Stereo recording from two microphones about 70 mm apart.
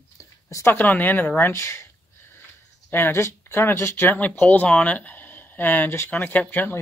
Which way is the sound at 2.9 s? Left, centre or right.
Left.